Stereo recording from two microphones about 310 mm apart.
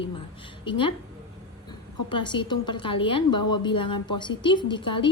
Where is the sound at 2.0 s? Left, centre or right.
Centre.